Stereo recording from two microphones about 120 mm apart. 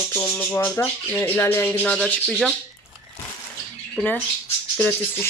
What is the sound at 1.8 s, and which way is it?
Speech, 5° left (ahead or behind).